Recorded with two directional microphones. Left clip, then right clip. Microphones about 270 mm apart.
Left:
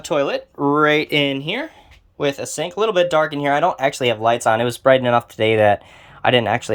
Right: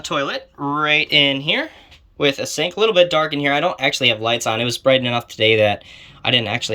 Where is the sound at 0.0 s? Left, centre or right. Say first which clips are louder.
Left 2 dB; left.